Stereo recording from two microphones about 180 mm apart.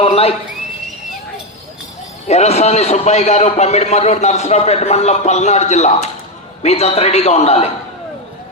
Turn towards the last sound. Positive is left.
turn(degrees=35)  # may be behind; listen again after turning